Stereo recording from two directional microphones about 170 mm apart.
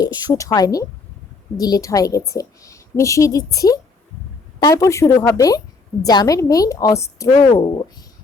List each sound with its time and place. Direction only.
0.3 s a woman's voice: 20° left (ahead or behind)